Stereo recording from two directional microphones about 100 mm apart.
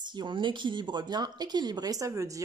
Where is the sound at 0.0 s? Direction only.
50° right (ahead or behind).